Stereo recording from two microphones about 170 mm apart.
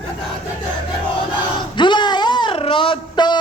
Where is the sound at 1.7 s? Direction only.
25° left (ahead or behind).